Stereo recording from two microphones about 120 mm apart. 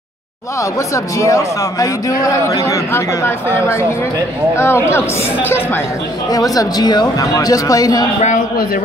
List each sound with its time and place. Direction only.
0.6 s speech: 25° left (ahead or behind)
6.3 s a man's voice: 30° left (ahead or behind)